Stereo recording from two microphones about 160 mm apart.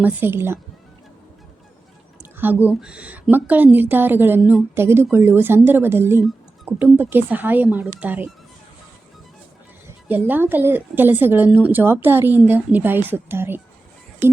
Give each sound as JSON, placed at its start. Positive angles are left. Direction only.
{"t": 0.0, "sound": "a woman's voice", "side_deg": -10}
{"t": 2.4, "sound": "a woman's voice", "side_deg": -10}
{"t": 10.1, "sound": "a woman's voice", "side_deg": -10}